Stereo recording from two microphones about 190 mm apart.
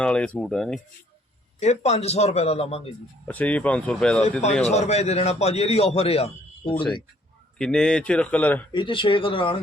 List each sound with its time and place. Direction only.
0.0 s speech: 5° left (ahead or behind)
1.5 s a man's voice: 35° left (ahead or behind)
3.2 s speech: 10° left (ahead or behind)
4.7 s a man's voice: 35° left (ahead or behind)
7.6 s speech: 5° left (ahead or behind)
8.7 s speech: 25° left (ahead or behind)